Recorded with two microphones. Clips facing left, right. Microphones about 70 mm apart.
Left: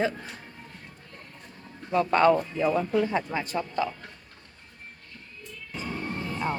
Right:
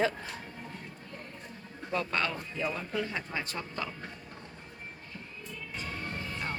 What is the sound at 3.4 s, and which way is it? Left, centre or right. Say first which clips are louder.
Speech: left 8 dB; centre.